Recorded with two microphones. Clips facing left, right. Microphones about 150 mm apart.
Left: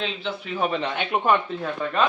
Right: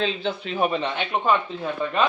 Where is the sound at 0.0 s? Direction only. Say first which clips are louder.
Right 4 dB; 35° right (ahead or behind).